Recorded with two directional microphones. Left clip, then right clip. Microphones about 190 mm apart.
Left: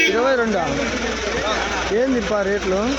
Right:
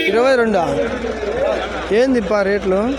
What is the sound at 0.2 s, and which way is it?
Speech, 20° right (ahead or behind).